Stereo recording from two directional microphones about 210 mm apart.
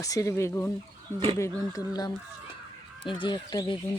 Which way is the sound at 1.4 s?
15° left (ahead or behind).